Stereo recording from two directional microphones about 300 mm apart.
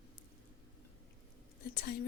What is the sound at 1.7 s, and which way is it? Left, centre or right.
Speech, left.